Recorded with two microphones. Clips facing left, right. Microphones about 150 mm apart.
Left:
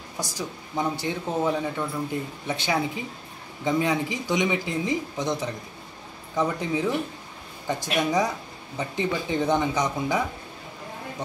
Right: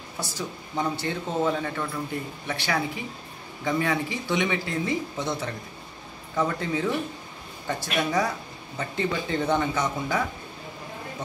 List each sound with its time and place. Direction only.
0.2 s speech: 15° left (ahead or behind)